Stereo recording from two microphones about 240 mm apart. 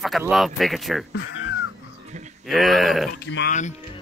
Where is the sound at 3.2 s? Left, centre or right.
Left.